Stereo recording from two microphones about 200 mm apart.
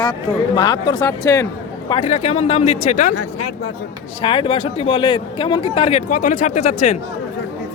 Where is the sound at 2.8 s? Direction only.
40° left (ahead or behind).